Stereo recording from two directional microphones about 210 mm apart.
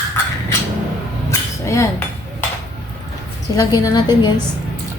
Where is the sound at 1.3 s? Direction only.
15° left (ahead or behind).